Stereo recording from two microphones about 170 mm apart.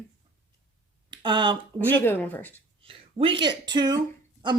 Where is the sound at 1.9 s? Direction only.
10° left (ahead or behind).